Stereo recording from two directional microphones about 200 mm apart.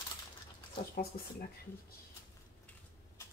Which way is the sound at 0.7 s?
50° left (ahead or behind).